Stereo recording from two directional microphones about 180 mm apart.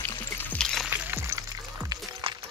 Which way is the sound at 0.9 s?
10° right (ahead or behind).